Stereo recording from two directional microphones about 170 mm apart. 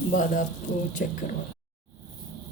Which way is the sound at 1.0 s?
55° left (ahead or behind).